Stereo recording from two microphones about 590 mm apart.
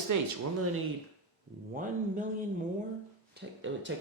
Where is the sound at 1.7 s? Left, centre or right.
Centre.